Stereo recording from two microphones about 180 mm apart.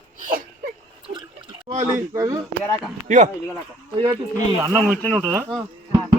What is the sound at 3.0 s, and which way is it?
Speech, 45° right (ahead or behind).